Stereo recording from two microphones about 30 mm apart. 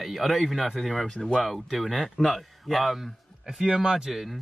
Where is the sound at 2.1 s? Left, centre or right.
Centre.